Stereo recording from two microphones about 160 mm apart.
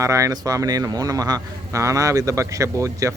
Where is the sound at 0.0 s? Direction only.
20° right (ahead or behind).